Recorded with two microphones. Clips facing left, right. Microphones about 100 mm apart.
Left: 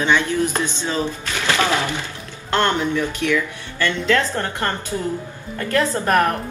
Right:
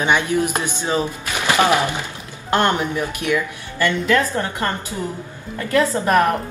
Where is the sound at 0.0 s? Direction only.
15° right (ahead or behind).